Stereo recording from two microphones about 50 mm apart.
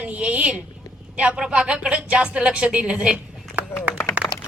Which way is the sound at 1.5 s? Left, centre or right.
Centre.